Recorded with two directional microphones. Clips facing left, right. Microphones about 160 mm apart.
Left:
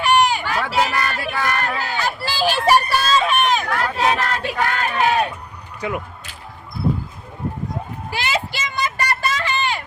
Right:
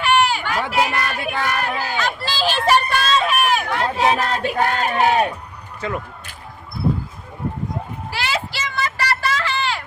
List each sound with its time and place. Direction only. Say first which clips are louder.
0.0 s run: left 1 dB; 15° left (ahead or behind)
0.6 s a sound: even; 10° right (ahead or behind)
2.0 s speech: left 1 dB; 10° left (ahead or behind); by 3.8 s 10° right (ahead or behind)
4.0 s child singing: right 2 dB; 25° right (ahead or behind)
5.8 s speech: left 1 dB; 15° left (ahead or behind)
8.1 s a sound: left 1 dB; 15° left (ahead or behind)